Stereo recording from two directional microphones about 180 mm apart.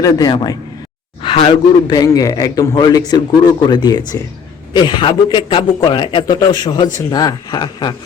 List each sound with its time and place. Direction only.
0.0 s a man's voice: 20° left (ahead or behind)